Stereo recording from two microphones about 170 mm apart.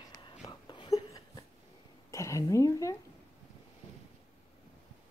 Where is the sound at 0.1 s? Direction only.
25° left (ahead or behind).